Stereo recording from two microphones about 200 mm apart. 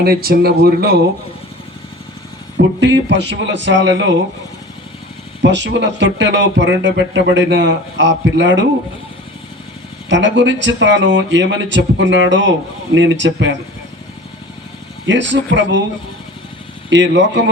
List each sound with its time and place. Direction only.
0.0 s speech: 50° right (ahead or behind)
2.6 s speech: 65° right (ahead or behind)
5.4 s speech: 60° right (ahead or behind)
10.1 s speech: 65° right (ahead or behind)
15.0 s speech: 65° right (ahead or behind)
16.9 s speech: 60° right (ahead or behind)